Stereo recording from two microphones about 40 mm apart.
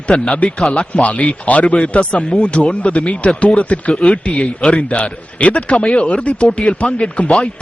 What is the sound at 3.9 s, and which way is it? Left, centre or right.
A man's voice, left.